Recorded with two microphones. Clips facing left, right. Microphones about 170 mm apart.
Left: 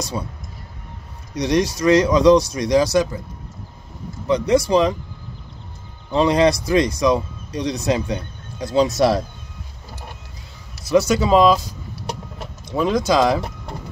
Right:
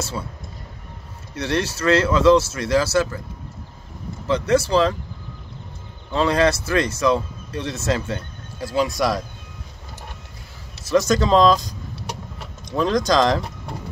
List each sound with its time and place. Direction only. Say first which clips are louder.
1.3 s speech: left 5 dB; 15° left (ahead or behind)
4.3 s speech: left 2 dB; 15° left (ahead or behind)
6.1 s speech: left 3 dB; 15° left (ahead or behind)
10.8 s speech: left 1 dB; 10° left (ahead or behind)